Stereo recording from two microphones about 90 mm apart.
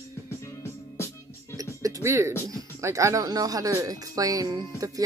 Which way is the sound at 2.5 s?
35° right (ahead or behind).